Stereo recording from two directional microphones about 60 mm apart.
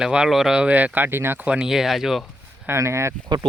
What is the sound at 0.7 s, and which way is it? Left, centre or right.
Speech, right.